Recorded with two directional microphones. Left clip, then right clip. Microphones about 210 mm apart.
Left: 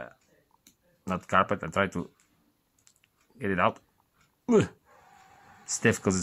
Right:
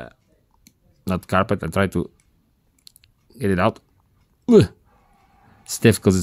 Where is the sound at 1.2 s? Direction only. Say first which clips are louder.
Right 4 dB; 60° right (ahead or behind).